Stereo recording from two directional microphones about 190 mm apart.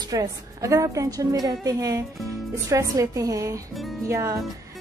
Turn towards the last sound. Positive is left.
turn(degrees=-15)  # may be behind; listen again after turning